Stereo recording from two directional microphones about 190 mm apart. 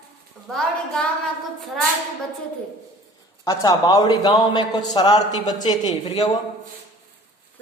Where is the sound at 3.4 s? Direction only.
20° left (ahead or behind).